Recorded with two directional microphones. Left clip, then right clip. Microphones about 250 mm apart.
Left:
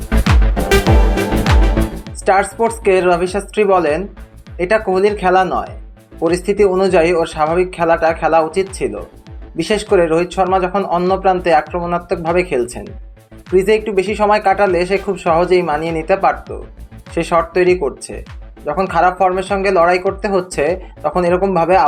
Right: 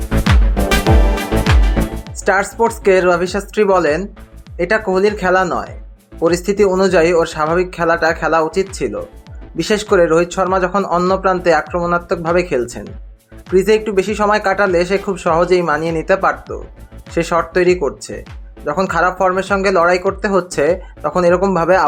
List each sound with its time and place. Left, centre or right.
0.1 s music: centre
2.2 s speech: centre